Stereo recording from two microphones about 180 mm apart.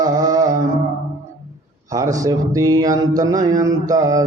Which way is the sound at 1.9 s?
20° right (ahead or behind).